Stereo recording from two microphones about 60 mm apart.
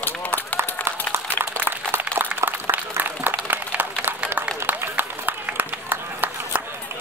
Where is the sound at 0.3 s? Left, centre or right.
Right.